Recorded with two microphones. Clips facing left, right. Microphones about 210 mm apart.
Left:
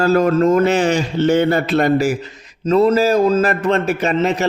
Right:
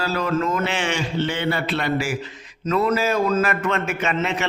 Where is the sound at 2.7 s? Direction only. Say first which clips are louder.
Left 7 dB; 30° left (ahead or behind).